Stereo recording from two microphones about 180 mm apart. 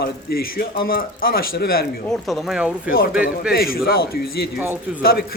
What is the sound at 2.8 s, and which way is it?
Speech, 55° left (ahead or behind).